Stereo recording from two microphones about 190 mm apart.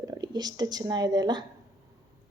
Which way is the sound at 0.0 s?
20° right (ahead or behind).